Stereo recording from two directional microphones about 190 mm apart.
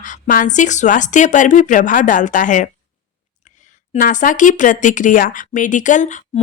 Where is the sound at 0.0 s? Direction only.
45° left (ahead or behind).